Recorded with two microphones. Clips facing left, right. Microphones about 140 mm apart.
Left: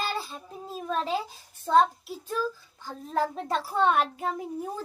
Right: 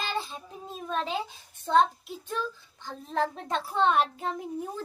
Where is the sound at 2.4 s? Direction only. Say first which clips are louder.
Left 4 dB; 5° left (ahead or behind).